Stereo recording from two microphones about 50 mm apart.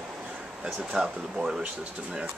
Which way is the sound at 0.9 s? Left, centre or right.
Centre.